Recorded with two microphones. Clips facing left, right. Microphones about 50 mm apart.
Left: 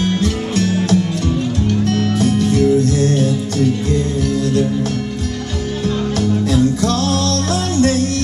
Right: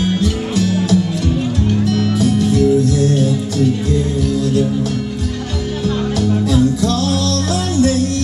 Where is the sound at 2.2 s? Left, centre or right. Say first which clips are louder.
Right 1 dB; left.